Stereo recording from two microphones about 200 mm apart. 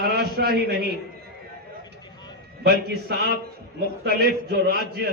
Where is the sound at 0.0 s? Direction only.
50° right (ahead or behind).